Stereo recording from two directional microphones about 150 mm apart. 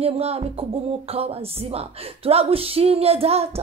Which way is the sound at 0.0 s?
40° right (ahead or behind).